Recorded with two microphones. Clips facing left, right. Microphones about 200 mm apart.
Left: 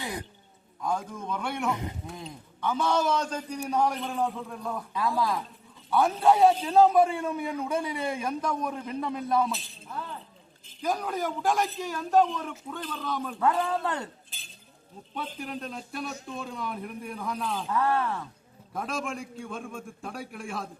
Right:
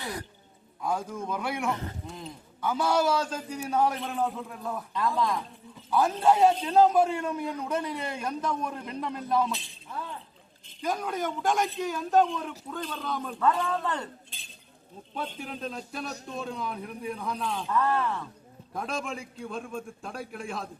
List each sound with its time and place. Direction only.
0.0 s speech: 15° left (ahead or behind)
0.8 s a man's voice: 5° right (ahead or behind)
1.7 s speech: 15° left (ahead or behind)
2.6 s a man's voice: 5° right (ahead or behind)
10.8 s a man's voice: centre (ahead or behind)
17.7 s a man's voice: 10° left (ahead or behind)